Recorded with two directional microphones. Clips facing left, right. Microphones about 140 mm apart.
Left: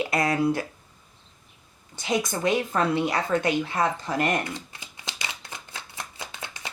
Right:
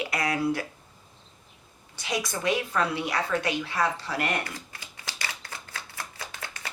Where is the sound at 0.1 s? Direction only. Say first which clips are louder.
Left 3 dB; 25° left (ahead or behind).